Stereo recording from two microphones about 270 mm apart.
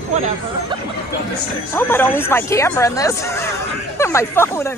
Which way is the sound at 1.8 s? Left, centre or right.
Centre.